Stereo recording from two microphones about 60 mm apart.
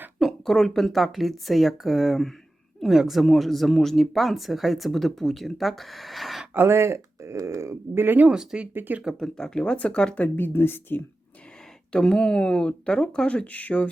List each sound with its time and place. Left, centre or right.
0.2 s a sound: centre
0.5 s speech: centre
6.5 s speech: right
8.0 s speech: right
8.3 s speech: centre
8.7 s speech: right
9.1 s speech: centre
10.3 s speech: left
11.9 s speech: centre